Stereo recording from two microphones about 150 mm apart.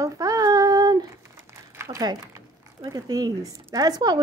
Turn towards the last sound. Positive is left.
turn(degrees=-25)  # may be behind; listen again after turning